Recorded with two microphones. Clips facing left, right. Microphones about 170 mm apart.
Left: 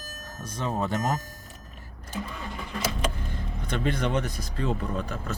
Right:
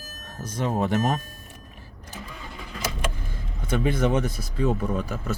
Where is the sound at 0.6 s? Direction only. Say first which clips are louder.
Right 4 dB; 15° right (ahead or behind).